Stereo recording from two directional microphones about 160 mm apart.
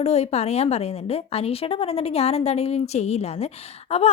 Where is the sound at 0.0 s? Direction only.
40° left (ahead or behind).